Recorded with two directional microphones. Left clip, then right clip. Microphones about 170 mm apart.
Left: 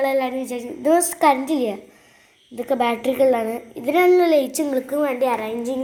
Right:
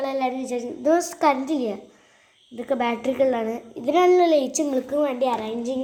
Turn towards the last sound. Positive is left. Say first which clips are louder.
# left 3 dB
turn(degrees=10)  # may be behind; listen again after turning